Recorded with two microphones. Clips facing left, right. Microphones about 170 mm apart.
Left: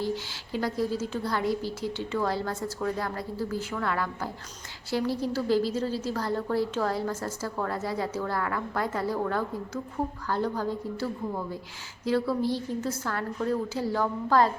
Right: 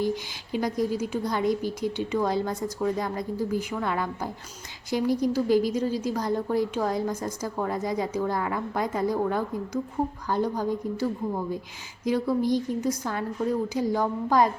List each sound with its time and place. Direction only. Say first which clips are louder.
0.0 s a woman's voice: right 3 dB; 15° right (ahead or behind)